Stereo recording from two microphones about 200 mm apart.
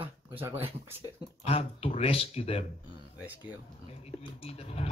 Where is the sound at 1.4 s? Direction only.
30° left (ahead or behind).